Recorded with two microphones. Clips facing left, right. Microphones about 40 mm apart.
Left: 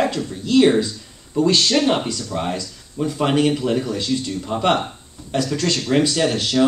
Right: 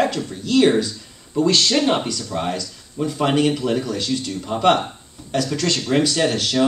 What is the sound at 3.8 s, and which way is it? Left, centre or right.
Speech, centre.